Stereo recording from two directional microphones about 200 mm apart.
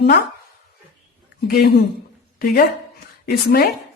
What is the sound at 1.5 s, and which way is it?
A woman's voice, 50° left (ahead or behind).